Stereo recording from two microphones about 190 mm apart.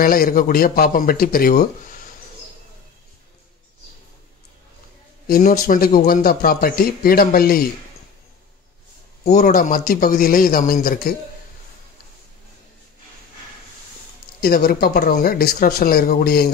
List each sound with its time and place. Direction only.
0.0 s a man's voice: 50° left (ahead or behind)
5.3 s a man's voice: 50° left (ahead or behind)
9.2 s a man's voice: 45° left (ahead or behind)
14.4 s a man's voice: 50° left (ahead or behind)